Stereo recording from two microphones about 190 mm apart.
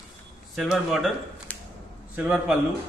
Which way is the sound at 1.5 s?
10° left (ahead or behind).